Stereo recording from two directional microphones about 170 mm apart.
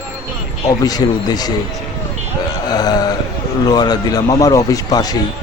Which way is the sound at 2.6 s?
25° left (ahead or behind).